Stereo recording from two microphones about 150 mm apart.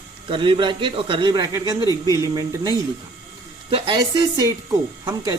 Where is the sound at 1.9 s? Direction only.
25° left (ahead or behind).